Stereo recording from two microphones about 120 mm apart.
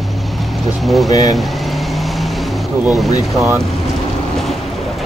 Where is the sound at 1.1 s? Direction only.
30° left (ahead or behind).